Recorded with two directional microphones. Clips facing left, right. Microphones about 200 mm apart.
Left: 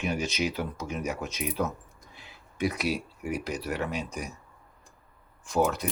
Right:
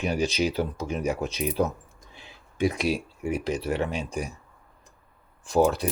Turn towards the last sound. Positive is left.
turn(degrees=-30)  # may be behind; listen again after turning